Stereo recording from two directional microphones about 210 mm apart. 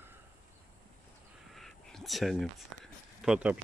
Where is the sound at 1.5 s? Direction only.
Centre (ahead or behind).